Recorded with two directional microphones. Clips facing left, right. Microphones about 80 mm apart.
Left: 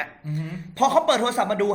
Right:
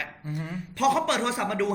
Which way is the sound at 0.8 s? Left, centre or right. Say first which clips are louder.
Left 5 dB; left.